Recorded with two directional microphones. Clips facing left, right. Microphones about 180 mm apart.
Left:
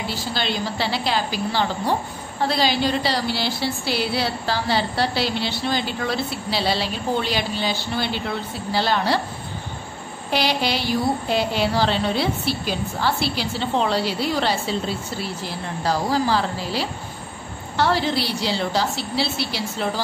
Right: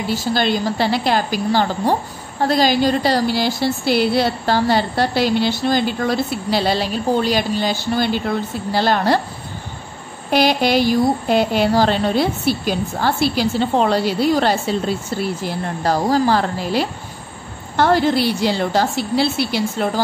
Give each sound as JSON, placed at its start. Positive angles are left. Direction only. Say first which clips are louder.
{"t": 0.1, "sound": "a woman's voice", "louder": "right 11 dB", "side_deg": -45}
{"t": 10.3, "sound": "a woman's voice", "louder": "right 7 dB", "side_deg": -50}
{"t": 15.8, "sound": "a woman's voice", "louder": "right 5 dB", "side_deg": -50}